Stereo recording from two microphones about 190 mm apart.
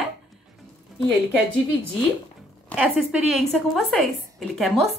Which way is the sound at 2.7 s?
5° right (ahead or behind).